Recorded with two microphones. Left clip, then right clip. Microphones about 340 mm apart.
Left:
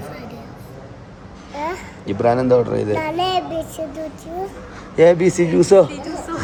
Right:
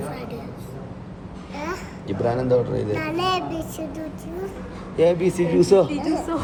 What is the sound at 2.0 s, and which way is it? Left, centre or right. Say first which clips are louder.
Speech: left 6 dB; left.